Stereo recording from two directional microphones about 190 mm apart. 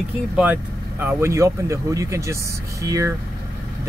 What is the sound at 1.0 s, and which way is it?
Speech, 15° right (ahead or behind).